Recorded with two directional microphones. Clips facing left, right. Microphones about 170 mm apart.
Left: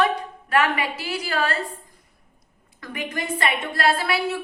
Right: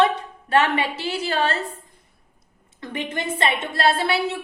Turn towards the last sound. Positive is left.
turn(degrees=-25)  # may be behind; listen again after turning